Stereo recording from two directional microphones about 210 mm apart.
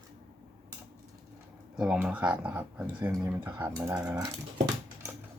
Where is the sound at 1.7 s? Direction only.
5° right (ahead or behind).